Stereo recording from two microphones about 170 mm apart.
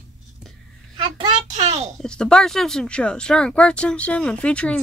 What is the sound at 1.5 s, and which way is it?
Speech, 40° right (ahead or behind).